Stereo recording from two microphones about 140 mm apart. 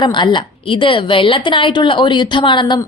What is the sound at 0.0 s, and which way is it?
A woman's voice, 35° left (ahead or behind).